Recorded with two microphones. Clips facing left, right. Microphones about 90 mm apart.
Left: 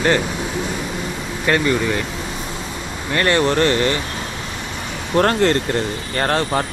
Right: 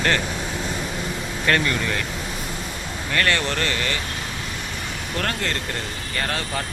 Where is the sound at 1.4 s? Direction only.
15° left (ahead or behind).